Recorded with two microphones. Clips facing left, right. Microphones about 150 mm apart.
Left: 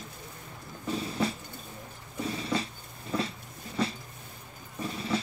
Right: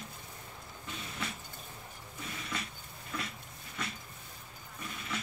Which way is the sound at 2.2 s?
30° left (ahead or behind).